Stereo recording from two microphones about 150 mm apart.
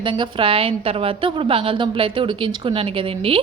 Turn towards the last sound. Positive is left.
turn(degrees=-40)  # may be behind; listen again after turning